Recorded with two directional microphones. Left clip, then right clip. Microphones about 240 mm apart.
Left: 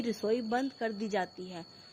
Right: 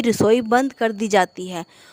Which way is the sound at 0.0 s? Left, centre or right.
Right.